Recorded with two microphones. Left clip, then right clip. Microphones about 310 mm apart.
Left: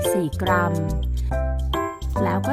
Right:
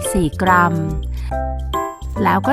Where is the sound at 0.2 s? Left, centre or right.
Centre.